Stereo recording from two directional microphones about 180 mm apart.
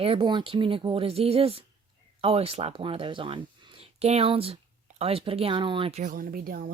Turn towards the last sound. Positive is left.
turn(degrees=-55)  # may be behind; listen again after turning